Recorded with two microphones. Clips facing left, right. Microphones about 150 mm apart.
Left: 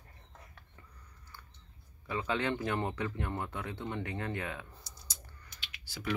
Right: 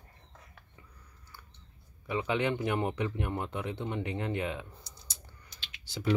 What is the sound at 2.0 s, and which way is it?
A man's voice, 15° right (ahead or behind).